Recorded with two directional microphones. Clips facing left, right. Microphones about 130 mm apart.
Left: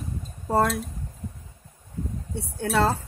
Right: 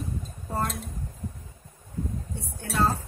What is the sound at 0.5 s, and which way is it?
Speech, 85° left.